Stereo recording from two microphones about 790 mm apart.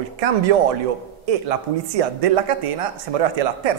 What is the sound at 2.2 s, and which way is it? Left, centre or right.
Speech, right.